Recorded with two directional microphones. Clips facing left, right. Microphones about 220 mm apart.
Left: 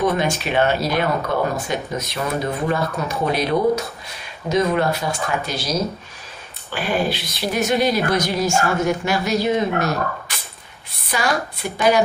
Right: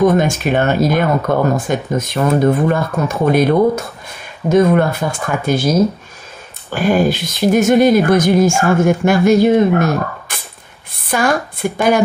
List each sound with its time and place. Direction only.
0.0 s speech: 45° right (ahead or behind)